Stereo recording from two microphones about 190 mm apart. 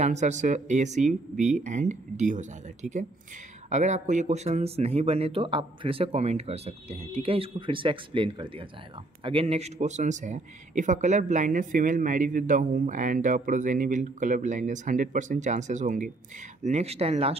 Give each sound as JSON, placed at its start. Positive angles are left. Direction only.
{"t": 0.0, "sound": "speech", "side_deg": -40}